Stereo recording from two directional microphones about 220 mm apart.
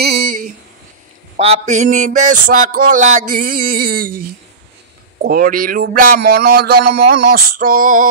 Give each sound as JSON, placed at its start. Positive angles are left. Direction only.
{"t": 0.0, "sound": "a sound", "side_deg": -40}
{"t": 1.3, "sound": "a man's voice", "side_deg": -30}
{"t": 5.2, "sound": "a man's voice", "side_deg": -40}